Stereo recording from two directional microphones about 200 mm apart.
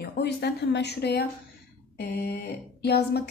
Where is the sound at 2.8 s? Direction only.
55° left (ahead or behind).